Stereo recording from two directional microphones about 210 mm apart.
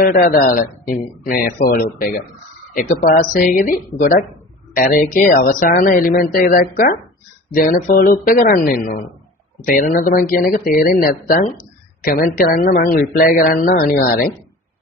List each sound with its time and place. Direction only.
0.0 s speech: 45° left (ahead or behind)